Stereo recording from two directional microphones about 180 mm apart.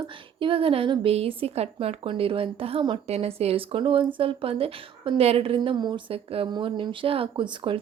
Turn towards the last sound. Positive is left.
turn(degrees=-25)  # may be behind; listen again after turning